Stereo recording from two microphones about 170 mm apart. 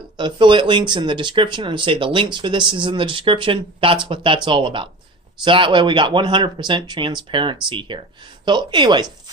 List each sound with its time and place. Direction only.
0.2 s speech: 30° right (ahead or behind)